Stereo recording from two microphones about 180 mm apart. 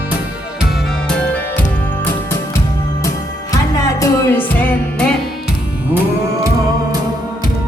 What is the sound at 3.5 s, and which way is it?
Music, 20° left (ahead or behind).